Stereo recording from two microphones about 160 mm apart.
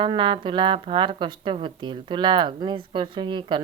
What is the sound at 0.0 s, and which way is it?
A woman's voice, 30° right (ahead or behind).